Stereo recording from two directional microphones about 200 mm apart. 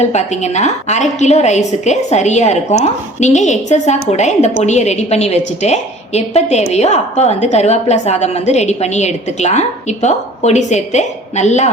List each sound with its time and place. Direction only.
0.0 s a woman's voice: 35° left (ahead or behind)